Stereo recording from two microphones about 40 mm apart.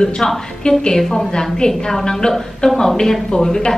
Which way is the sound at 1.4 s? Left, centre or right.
Centre.